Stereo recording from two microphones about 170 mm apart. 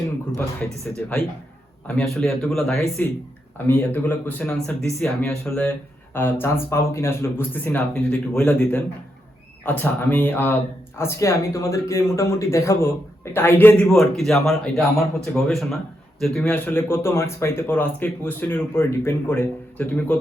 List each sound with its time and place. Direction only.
1.0 s speech: 10° left (ahead or behind)